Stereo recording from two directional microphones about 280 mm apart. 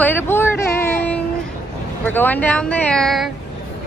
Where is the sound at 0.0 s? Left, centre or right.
Centre.